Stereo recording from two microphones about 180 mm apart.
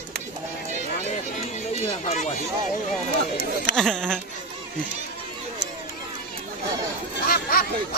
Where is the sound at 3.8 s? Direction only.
5° left (ahead or behind).